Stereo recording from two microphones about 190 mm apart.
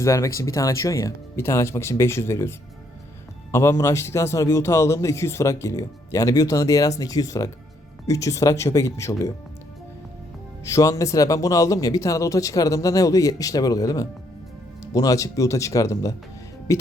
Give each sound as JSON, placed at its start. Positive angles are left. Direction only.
{"t": 0.0, "sound": "a man's voice", "side_deg": 15}
{"t": 10.6, "sound": "a man's voice", "side_deg": 15}